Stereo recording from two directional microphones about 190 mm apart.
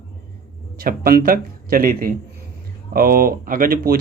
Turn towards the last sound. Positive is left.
turn(degrees=-50)  # may be behind; listen again after turning